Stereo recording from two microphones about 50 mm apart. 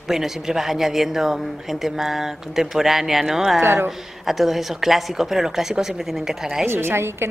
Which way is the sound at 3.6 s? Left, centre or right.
Right.